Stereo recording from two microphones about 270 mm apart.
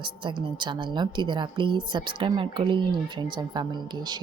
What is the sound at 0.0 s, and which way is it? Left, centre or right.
Speech, centre.